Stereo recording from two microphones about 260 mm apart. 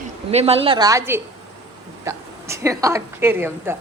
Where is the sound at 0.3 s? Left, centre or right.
Right.